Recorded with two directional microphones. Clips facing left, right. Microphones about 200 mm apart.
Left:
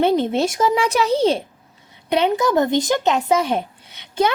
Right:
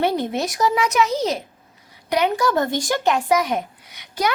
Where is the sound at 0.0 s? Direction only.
20° left (ahead or behind).